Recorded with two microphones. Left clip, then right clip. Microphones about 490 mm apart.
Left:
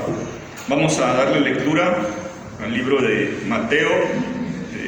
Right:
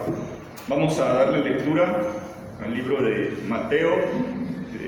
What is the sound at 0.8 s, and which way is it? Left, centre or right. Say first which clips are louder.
Speech: left 3 dB; centre.